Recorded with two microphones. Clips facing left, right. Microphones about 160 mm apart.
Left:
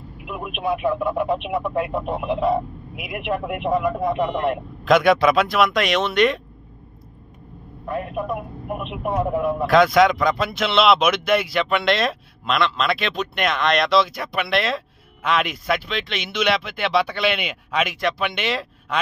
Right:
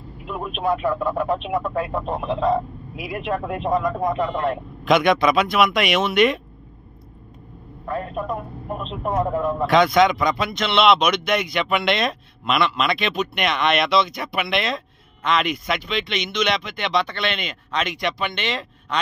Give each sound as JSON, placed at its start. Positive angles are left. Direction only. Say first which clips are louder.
{"t": 0.2, "sound": "speech", "louder": "right 2 dB", "side_deg": 10}
{"t": 4.8, "sound": "speech", "louder": "left 1 dB", "side_deg": 0}
{"t": 7.9, "sound": "speech", "louder": "left 1 dB", "side_deg": 10}